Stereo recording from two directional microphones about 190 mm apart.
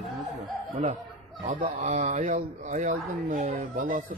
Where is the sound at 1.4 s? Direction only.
40° right (ahead or behind).